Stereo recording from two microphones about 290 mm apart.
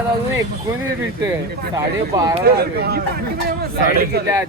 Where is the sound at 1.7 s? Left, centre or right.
Centre.